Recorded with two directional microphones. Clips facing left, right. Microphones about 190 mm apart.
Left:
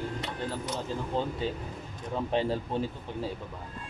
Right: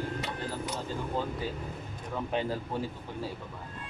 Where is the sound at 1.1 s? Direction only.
25° left (ahead or behind).